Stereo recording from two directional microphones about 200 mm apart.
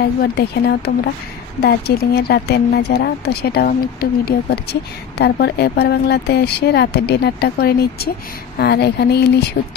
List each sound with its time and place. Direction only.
0.2 s speech: 55° left (ahead or behind)